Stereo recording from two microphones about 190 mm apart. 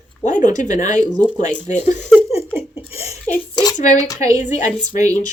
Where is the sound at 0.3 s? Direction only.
40° left (ahead or behind).